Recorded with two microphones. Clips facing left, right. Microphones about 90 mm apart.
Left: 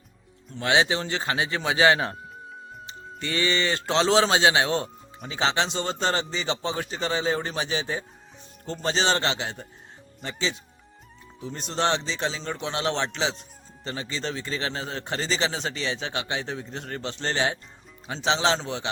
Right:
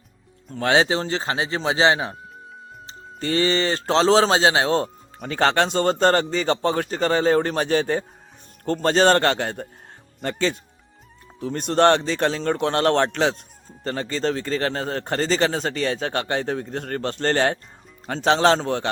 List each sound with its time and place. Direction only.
0.4 s a man's voice: 40° right (ahead or behind)